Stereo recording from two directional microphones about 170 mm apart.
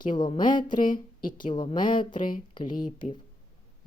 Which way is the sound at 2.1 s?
50° left (ahead or behind).